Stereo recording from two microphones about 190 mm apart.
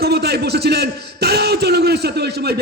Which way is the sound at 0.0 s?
60° right (ahead or behind).